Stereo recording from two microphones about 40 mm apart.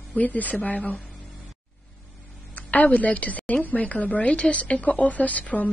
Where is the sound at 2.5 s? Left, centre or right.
Left.